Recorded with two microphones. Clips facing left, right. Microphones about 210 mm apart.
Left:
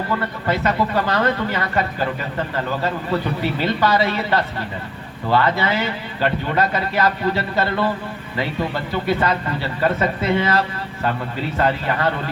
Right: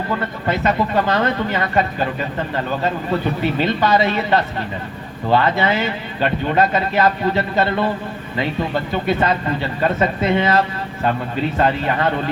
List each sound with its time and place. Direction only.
0.2 s a man's voice: 20° right (ahead or behind)